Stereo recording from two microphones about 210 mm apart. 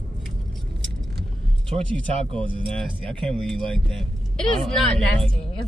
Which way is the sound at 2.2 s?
25° right (ahead or behind).